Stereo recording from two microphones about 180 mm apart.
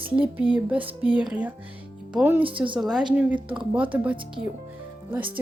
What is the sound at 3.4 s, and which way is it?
Speech, 25° right (ahead or behind).